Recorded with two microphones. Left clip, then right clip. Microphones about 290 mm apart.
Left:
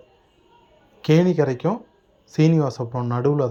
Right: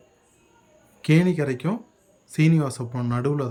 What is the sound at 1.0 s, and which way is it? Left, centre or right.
Speech, centre.